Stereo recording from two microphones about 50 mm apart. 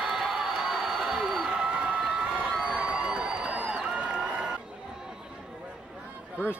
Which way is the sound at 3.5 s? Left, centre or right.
Centre.